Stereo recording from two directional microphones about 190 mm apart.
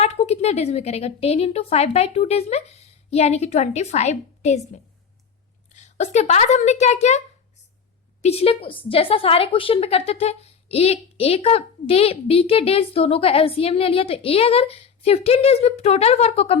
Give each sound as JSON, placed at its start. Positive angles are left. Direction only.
{"t": 0.0, "sound": "a woman's voice", "side_deg": 35}
{"t": 5.7, "sound": "a woman's voice", "side_deg": 35}
{"t": 8.2, "sound": "a woman's voice", "side_deg": 35}